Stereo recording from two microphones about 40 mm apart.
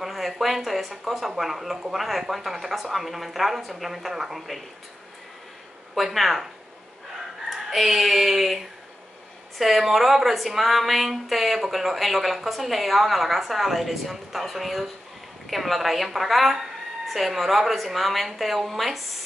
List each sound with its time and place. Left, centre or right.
0.0 s speech: centre
5.9 s speech: centre
7.4 s speech: centre